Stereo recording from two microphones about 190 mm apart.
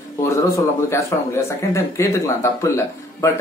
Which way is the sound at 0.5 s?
15° left (ahead or behind).